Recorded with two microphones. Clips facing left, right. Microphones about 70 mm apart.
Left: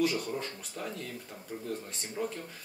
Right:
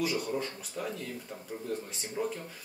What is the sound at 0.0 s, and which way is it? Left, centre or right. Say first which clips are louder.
Speech: left 1 dB; centre.